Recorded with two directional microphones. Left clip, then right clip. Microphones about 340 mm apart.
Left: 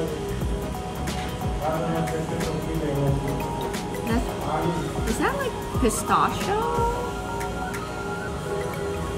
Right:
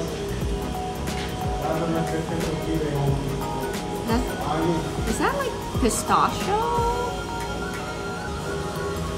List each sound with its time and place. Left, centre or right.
5.8 s speech: centre